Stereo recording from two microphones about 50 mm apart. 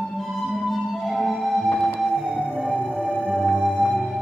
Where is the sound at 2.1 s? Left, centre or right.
Centre.